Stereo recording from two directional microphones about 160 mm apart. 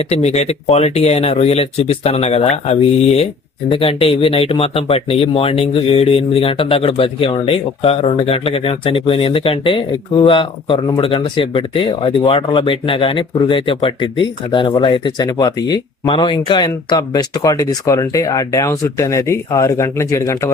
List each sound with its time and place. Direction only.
0.0 s speech: 40° left (ahead or behind); by 20.5 s 20° left (ahead or behind)